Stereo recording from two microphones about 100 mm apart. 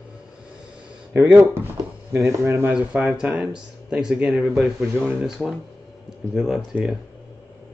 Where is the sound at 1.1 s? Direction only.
15° right (ahead or behind).